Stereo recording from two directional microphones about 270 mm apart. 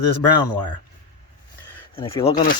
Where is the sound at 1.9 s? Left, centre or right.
Centre.